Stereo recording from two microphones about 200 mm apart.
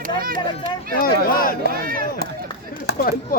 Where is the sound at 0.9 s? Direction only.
45° left (ahead or behind).